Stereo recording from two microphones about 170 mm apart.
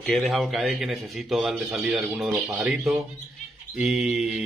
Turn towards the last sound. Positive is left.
turn(degrees=-5)  # may be behind; listen again after turning